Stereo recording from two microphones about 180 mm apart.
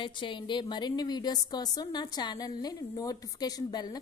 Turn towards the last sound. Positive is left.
turn(degrees=20)  # may be behind; listen again after turning